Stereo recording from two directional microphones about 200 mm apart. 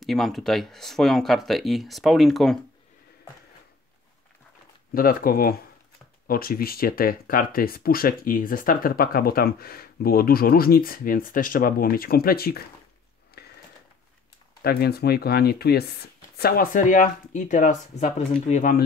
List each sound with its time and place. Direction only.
0.0 s speech: centre (ahead or behind)
4.9 s speech: 45° left (ahead or behind)
13.3 s a sound: 50° left (ahead or behind)
14.6 s speech: 50° left (ahead or behind)